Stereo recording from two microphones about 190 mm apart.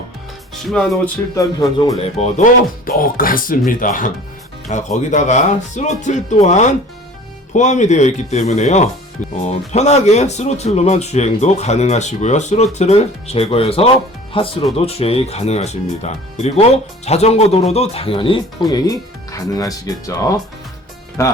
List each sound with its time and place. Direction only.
0.7 s speech: centre (ahead or behind)
1.4 s speech: 20° left (ahead or behind)
2.1 s speech: 35° left (ahead or behind)
2.8 s speech: 50° left (ahead or behind); by 21.3 s 15° left (ahead or behind)